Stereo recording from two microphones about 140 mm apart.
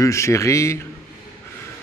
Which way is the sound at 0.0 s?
20° left (ahead or behind).